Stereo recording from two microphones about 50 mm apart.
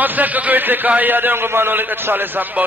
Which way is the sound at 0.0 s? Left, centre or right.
Right.